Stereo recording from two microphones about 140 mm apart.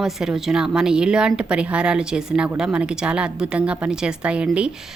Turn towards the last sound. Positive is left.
turn(degrees=-10)  # may be behind; listen again after turning